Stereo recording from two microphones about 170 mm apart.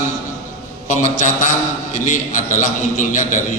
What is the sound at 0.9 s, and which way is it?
A man's voice, 45° left (ahead or behind).